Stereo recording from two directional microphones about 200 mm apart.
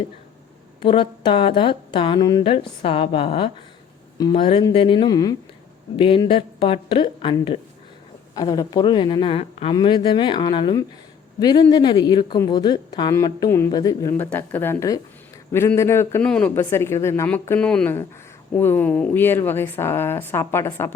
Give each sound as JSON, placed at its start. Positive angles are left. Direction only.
{"t": 0.8, "sound": "a woman's voice", "side_deg": 25}